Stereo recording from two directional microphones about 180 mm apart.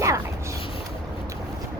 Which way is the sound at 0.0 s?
15° right (ahead or behind).